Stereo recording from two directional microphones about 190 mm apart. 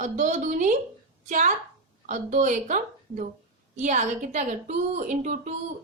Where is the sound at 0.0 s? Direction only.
40° right (ahead or behind).